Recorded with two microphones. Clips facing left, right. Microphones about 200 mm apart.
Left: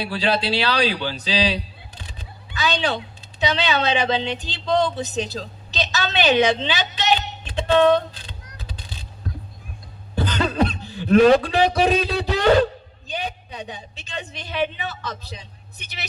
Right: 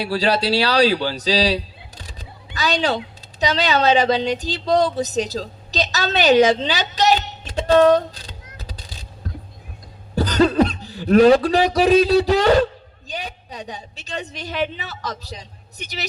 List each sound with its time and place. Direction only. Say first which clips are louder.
0.0 s speech: right 3 dB; 40° right (ahead or behind)
2.0 s a sound: right 1 dB; 40° right (ahead or behind)
3.4 s speech: right 3 dB; 40° right (ahead or behind)
8.5 s vehicle: even; 40° right (ahead or behind)
10.2 s a man's voice: right 6 dB; 40° right (ahead or behind)